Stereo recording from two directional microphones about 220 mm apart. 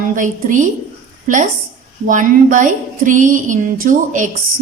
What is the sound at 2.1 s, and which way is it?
Speech, 35° right (ahead or behind).